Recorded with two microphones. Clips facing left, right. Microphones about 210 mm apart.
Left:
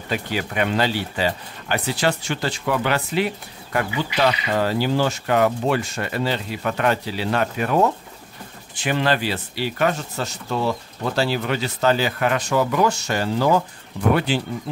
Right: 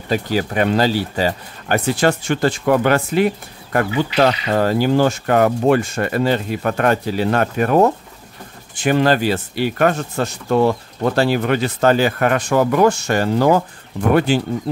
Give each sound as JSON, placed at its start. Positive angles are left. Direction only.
{"t": 0.1, "sound": "speech", "side_deg": -40}